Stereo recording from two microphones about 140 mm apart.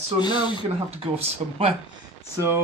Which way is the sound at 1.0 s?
45° right (ahead or behind).